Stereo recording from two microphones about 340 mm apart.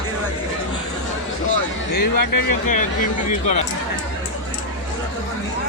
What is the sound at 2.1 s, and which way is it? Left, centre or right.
Speech, left.